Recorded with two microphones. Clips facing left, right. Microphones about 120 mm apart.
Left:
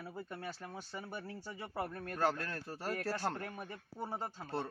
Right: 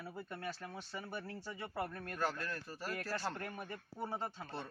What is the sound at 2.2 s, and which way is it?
Speech, 55° left (ahead or behind).